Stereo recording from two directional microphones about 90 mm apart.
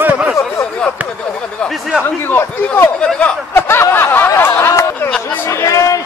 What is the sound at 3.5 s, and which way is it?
Snicker, 25° left (ahead or behind).